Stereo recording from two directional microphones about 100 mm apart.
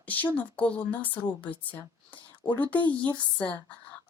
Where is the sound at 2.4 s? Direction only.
60° left (ahead or behind).